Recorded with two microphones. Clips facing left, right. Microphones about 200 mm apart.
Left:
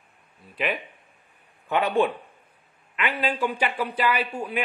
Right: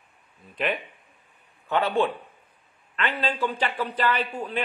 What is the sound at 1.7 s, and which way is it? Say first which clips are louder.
A man's voice: left 1 dB; 15° left (ahead or behind).